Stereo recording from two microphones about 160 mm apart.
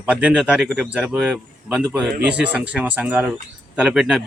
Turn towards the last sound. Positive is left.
turn(degrees=-5)  # may be behind; listen again after turning